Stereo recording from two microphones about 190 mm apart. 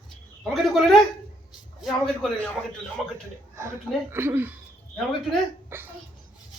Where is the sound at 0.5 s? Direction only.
Centre (ahead or behind).